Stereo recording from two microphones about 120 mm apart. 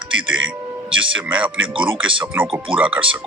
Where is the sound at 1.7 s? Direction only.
45° right (ahead or behind).